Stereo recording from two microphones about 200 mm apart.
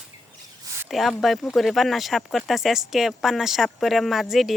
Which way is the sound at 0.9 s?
Centre (ahead or behind).